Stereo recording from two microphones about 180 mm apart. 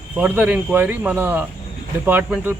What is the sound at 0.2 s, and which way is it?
Speech, 10° right (ahead or behind).